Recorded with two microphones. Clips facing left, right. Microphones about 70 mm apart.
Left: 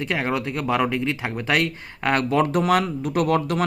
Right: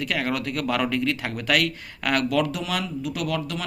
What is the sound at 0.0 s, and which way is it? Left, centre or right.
Speech, left.